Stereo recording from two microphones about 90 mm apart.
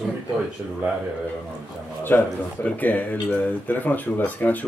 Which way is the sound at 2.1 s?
20° left (ahead or behind).